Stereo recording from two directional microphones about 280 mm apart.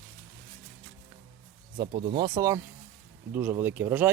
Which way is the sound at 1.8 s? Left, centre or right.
Centre.